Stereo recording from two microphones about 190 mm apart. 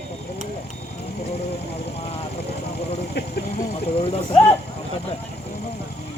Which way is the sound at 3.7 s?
30° left (ahead or behind).